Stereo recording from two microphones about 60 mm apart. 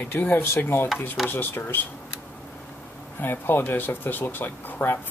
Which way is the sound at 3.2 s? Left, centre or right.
Left.